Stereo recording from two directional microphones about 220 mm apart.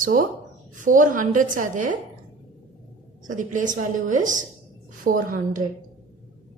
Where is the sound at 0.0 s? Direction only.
40° right (ahead or behind).